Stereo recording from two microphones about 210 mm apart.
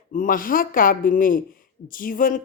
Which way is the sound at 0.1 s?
40° left (ahead or behind).